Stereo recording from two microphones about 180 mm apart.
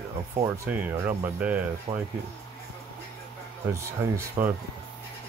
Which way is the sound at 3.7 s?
15° right (ahead or behind).